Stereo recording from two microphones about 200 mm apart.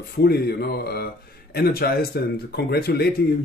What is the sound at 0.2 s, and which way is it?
Speech, 50° left (ahead or behind).